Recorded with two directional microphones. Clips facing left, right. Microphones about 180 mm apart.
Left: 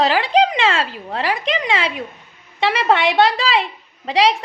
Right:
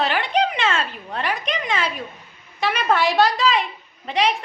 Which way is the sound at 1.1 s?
90° left.